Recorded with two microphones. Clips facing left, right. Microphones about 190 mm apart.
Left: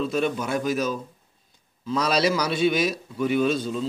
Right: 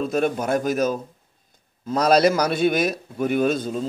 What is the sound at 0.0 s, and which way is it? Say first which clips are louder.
A man's voice: right 3 dB; 50° right (ahead or behind).